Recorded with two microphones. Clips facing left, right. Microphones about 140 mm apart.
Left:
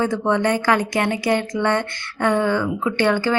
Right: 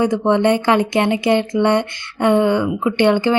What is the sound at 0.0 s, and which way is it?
Speech, 20° right (ahead or behind).